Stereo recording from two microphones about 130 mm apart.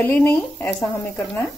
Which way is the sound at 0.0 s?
15° left (ahead or behind).